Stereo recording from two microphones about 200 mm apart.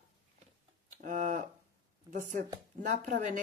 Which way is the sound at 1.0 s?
40° right (ahead or behind).